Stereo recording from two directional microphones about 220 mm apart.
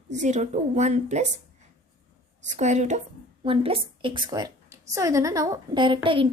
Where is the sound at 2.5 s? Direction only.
30° right (ahead or behind).